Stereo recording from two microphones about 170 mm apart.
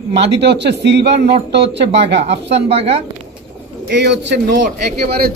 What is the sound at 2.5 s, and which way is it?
Speech, 35° right (ahead or behind).